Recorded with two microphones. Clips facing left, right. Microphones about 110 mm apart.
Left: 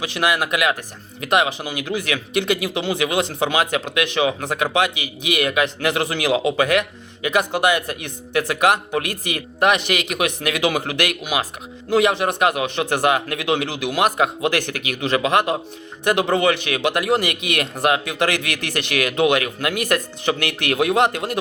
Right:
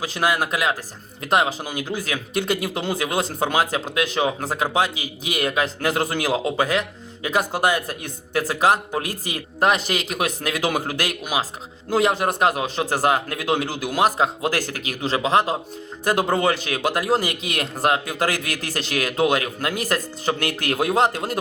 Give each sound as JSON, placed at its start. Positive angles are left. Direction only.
{"t": 0.0, "sound": "a man's voice", "side_deg": -40}
{"t": 6.7, "sound": "a sound", "side_deg": 65}
{"t": 7.3, "sound": "a man's voice", "side_deg": -40}
{"t": 16.0, "sound": "a man's voice", "side_deg": -40}
{"t": 17.2, "sound": "a man's voice", "side_deg": 65}
{"t": 17.6, "sound": "a man's voice", "side_deg": -35}
{"t": 18.3, "sound": "a man's voice", "side_deg": 65}
{"t": 18.7, "sound": "a man's voice", "side_deg": -35}